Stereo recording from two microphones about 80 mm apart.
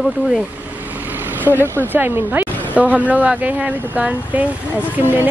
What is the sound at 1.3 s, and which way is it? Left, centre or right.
Speech, right.